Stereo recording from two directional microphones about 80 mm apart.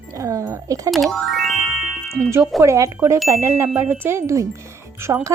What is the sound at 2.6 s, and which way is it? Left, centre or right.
A woman's voice, right.